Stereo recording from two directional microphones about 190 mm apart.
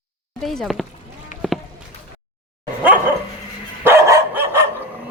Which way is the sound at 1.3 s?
40° left (ahead or behind).